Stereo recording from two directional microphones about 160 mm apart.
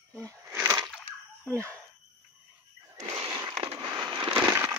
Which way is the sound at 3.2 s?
25° right (ahead or behind).